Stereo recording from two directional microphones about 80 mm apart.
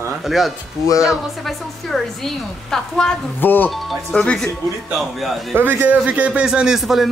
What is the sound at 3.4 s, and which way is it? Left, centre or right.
Speech, left.